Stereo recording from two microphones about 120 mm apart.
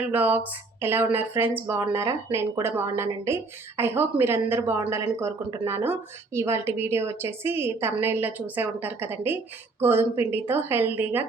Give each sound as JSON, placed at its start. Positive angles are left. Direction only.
{"t": 0.1, "sound": "a woman's voice", "side_deg": -15}